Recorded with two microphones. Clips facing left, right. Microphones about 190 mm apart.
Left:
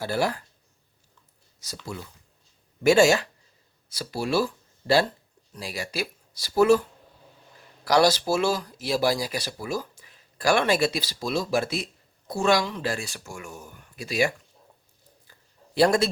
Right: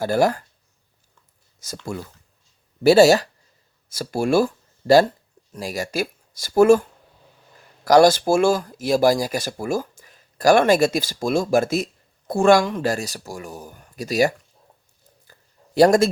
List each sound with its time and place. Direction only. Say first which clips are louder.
0.0 s speech: right 7 dB; 45° right (ahead or behind)
1.8 s speech: right 6 dB; 50° right (ahead or behind)
2.8 s speech: right 5 dB; 35° right (ahead or behind)
7.9 s speech: right 7 dB; 50° right (ahead or behind)
15.3 s a sound: right 7 dB; 45° right (ahead or behind)